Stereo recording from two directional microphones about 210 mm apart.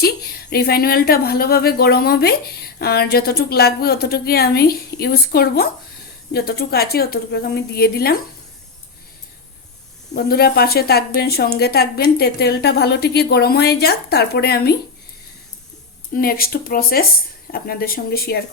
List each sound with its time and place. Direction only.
0.5 s speech: 45° left (ahead or behind)
10.2 s speech: 45° left (ahead or behind)
16.1 s speech: 45° left (ahead or behind)